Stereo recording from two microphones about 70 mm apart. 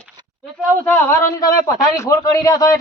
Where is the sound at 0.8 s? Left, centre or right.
Left.